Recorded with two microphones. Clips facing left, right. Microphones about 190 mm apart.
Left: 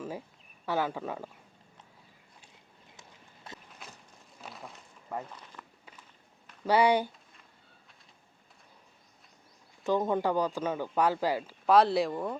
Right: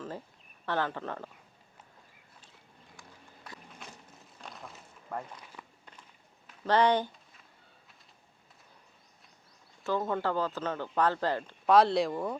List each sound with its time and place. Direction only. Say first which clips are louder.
0.6 s a man's voice: left 1 dB; 10° left (ahead or behind)
2.9 s clip-clop: right 2 dB; 20° left (ahead or behind)
4.4 s a sound: left 1 dB; centre (ahead or behind)
5.3 s walk: even; 10° right (ahead or behind)
6.7 s a man's voice: left 1 dB; 10° left (ahead or behind)
9.8 s a man's voice: left 3 dB; 15° left (ahead or behind); by 12.4 s centre (ahead or behind)